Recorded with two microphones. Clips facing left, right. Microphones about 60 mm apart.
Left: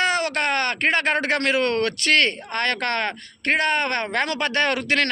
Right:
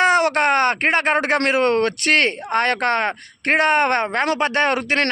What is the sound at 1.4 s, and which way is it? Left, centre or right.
A man's voice, right.